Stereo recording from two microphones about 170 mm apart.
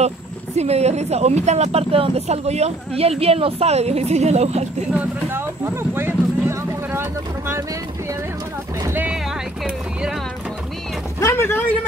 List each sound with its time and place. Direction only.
0.6 s speech: 40° right (ahead or behind)
4.9 s speech: 15° right (ahead or behind)
8.8 s boat: 10° right (ahead or behind)
11.1 s a sound: 15° left (ahead or behind)